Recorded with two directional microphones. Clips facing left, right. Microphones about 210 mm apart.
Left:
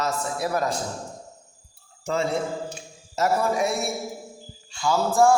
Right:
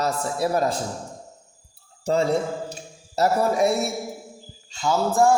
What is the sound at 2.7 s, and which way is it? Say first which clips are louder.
Speech: right 3 dB; 35° right (ahead or behind).